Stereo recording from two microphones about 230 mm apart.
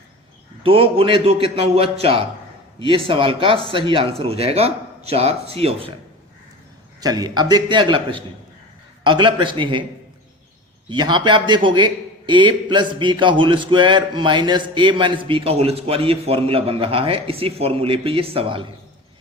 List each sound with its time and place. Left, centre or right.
0.6 s a man's voice: right
7.0 s a man's voice: centre
10.8 s a man's voice: centre